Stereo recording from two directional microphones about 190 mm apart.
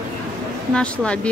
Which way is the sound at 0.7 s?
5° left (ahead or behind).